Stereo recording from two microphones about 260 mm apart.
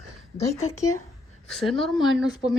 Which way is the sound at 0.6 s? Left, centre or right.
Left.